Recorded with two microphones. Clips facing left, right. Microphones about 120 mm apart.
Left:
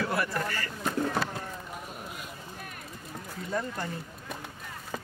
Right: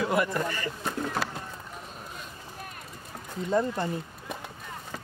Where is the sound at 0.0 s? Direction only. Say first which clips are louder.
Right 3 dB; 20° right (ahead or behind).